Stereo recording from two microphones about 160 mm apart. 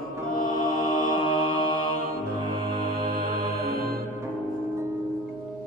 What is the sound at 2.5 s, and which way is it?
Music, 30° right (ahead or behind).